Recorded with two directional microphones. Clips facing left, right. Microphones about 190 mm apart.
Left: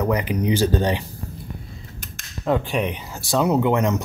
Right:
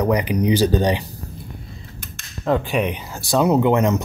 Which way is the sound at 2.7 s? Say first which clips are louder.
Right 2 dB; 15° right (ahead or behind).